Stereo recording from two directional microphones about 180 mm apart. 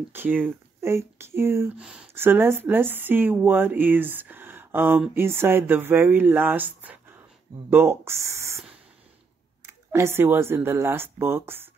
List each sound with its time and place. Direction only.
0.1 s speech: 10° right (ahead or behind)
9.7 s speech: 15° right (ahead or behind)